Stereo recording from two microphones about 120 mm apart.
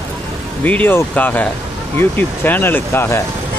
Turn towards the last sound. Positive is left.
turn(degrees=20)  # may be behind; listen again after turning